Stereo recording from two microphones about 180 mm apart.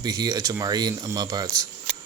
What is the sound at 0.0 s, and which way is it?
Speech, 20° right (ahead or behind).